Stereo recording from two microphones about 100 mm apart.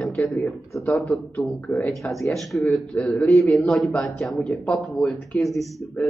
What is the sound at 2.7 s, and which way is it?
A man's voice, 10° left (ahead or behind).